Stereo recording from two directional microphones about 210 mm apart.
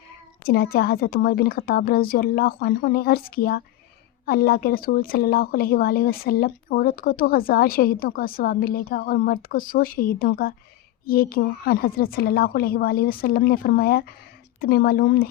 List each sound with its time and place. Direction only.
0.4 s a woman's voice: 45° left (ahead or behind)